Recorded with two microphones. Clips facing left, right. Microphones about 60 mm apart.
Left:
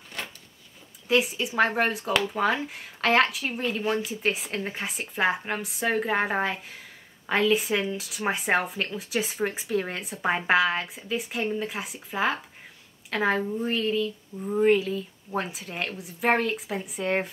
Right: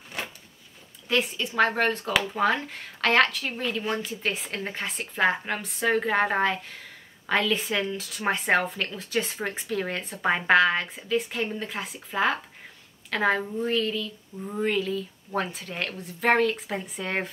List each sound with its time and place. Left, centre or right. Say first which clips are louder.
1.0 s speech: left 2 dB; centre
7.3 s speech: left 2 dB; centre
13.7 s a sound: even; left
14.4 s speech: left 5 dB; centre